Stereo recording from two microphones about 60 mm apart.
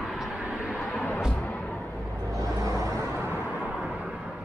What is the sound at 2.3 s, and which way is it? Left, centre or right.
Vehicle, right.